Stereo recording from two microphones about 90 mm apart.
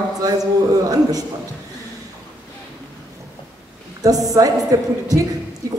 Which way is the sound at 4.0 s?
45° right (ahead or behind).